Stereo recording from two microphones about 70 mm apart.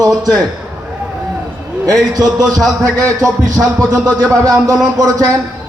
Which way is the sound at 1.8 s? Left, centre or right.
Right.